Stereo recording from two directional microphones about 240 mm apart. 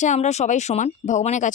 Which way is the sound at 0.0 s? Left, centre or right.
Left.